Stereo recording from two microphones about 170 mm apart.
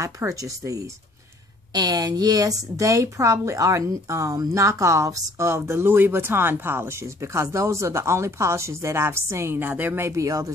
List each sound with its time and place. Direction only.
0.0 s a woman's voice: 20° right (ahead or behind)